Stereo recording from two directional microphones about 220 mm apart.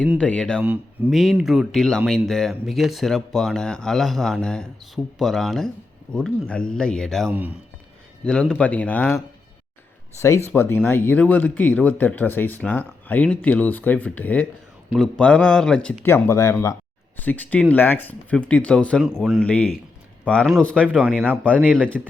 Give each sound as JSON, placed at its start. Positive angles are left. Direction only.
{"t": 0.1, "sound": "speech", "side_deg": 5}
{"t": 0.6, "sound": "speech", "side_deg": -10}
{"t": 21.6, "sound": "a man's voice", "side_deg": -5}